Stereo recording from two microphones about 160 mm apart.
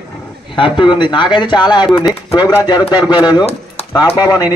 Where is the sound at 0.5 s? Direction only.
30° left (ahead or behind).